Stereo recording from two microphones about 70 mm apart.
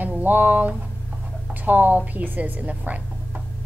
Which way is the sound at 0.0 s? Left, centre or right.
Right.